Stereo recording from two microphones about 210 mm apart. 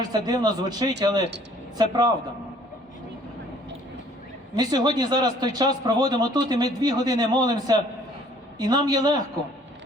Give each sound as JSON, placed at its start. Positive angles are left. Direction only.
{"t": 0.3, "sound": "speech", "side_deg": -20}
{"t": 4.5, "sound": "speech", "side_deg": -20}